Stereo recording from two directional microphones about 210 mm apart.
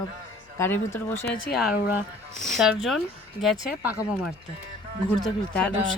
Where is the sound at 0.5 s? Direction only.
10° left (ahead or behind).